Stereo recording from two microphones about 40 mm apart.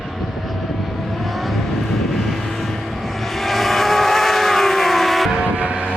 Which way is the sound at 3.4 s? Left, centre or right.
Centre.